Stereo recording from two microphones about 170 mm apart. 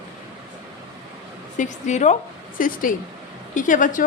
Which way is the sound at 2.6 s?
55° left (ahead or behind).